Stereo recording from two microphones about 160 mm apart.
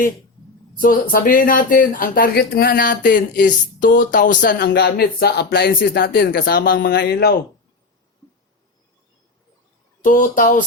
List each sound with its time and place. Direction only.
0.8 s speech: 60° left (ahead or behind); by 7.3 s 75° left (ahead or behind)
10.0 s speech: 55° left (ahead or behind)